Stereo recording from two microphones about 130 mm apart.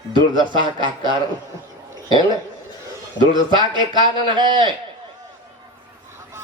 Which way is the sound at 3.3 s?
35° right (ahead or behind).